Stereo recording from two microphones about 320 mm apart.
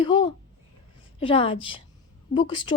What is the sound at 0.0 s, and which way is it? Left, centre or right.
Speech, centre.